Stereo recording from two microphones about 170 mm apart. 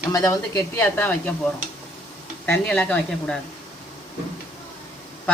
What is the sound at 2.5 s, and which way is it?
Speech, 10° left (ahead or behind).